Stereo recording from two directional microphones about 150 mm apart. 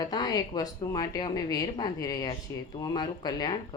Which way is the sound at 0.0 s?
25° left (ahead or behind).